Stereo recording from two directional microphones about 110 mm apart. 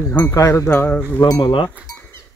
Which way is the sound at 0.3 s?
30° left (ahead or behind).